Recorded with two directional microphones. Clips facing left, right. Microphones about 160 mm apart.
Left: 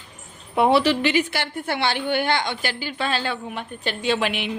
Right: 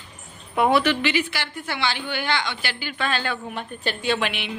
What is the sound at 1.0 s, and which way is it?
A woman's voice, 45° left (ahead or behind).